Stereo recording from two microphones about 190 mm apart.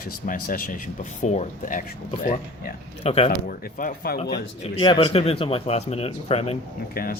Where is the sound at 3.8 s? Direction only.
50° left (ahead or behind).